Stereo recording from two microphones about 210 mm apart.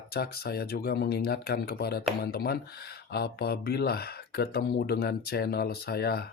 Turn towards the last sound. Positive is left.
turn(degrees=50)  # may be behind; listen again after turning